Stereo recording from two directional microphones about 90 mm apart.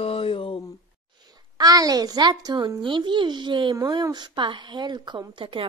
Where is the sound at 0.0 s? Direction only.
90° left.